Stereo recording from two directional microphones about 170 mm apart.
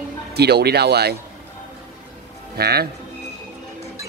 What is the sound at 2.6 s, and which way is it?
Speech, 70° right (ahead or behind).